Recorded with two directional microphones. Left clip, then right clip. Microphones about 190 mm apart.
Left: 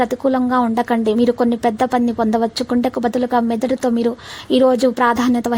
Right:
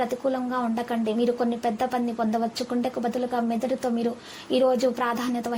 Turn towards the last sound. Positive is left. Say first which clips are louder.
# left 11 dB
turn(degrees=45)  # may be behind; listen again after turning